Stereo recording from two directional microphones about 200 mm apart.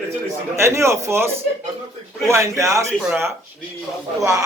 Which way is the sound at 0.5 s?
15° right (ahead or behind).